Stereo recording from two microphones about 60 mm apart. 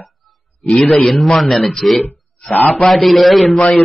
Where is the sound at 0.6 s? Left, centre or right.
Left.